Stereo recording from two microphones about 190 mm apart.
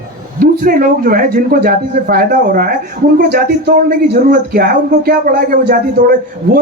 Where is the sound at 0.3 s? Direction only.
50° right (ahead or behind).